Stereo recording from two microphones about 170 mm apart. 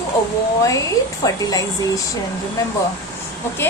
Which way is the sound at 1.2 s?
20° left (ahead or behind).